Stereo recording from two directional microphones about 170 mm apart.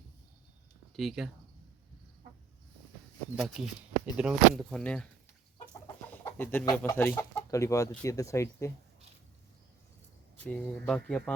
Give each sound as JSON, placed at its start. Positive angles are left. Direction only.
{"t": 0.9, "sound": "speech", "side_deg": 0}
{"t": 3.3, "sound": "speech", "side_deg": 0}
{"t": 6.1, "sound": "chicken", "side_deg": 10}
{"t": 6.7, "sound": "speech", "side_deg": 15}
{"t": 10.3, "sound": "speech", "side_deg": 10}